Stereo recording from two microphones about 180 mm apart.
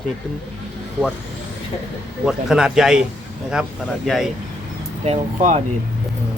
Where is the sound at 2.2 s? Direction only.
5° right (ahead or behind).